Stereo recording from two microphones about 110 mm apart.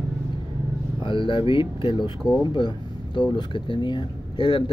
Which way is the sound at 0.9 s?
50° left (ahead or behind).